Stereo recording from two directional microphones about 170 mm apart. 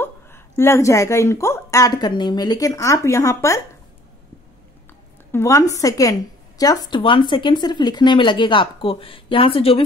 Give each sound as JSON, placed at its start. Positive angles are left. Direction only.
{"t": 0.0, "sound": "a woman's voice", "side_deg": 15}
{"t": 5.3, "sound": "speech", "side_deg": 15}